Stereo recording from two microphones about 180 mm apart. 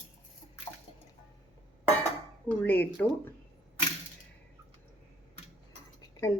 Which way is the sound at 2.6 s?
10° left (ahead or behind).